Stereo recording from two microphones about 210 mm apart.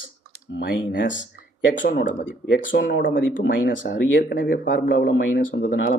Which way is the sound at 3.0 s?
40° left (ahead or behind).